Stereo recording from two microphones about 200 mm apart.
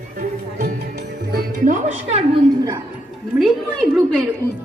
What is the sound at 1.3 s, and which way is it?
Music, 40° right (ahead or behind).